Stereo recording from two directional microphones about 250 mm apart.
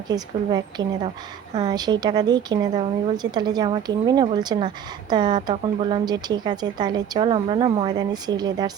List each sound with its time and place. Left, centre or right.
0.1 s a woman's voice: centre